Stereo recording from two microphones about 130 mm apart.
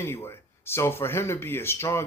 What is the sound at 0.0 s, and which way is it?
Speech, 20° left (ahead or behind).